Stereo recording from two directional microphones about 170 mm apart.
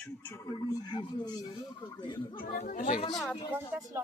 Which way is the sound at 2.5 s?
55° left (ahead or behind).